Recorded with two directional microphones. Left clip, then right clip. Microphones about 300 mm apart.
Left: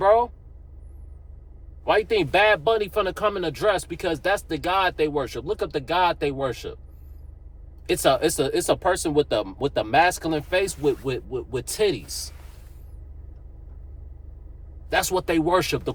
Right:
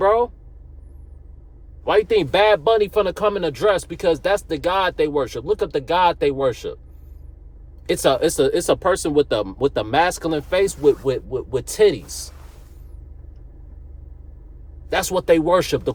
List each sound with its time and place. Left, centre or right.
0.0 s vehicle: centre
1.8 s speech: centre
7.9 s speech: centre
12.0 s speech: right
14.8 s speech: centre